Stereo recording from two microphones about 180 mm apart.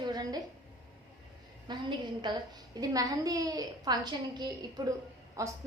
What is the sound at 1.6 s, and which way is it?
A woman's voice, 25° right (ahead or behind).